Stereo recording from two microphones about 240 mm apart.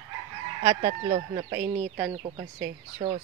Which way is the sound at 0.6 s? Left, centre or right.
Right.